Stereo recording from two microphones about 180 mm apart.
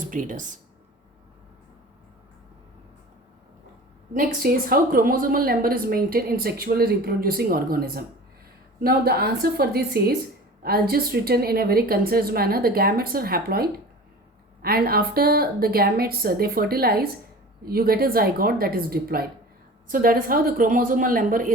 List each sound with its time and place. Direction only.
0.0 s speech: 45° right (ahead or behind)
4.1 s a woman's voice: 50° right (ahead or behind)